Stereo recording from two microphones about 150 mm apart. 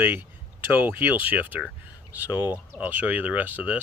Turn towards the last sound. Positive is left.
turn(degrees=-10)  # may be behind; listen again after turning